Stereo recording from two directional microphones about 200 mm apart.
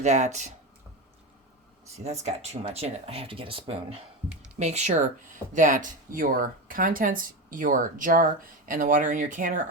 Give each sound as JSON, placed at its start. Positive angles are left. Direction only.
{"t": 0.0, "sound": "speech", "side_deg": -35}
{"t": 2.0, "sound": "speech", "side_deg": -35}